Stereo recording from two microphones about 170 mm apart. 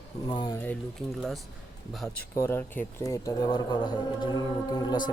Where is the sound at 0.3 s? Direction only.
25° left (ahead or behind).